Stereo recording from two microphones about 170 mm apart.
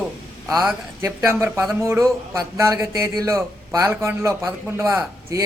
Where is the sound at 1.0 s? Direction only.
15° right (ahead or behind).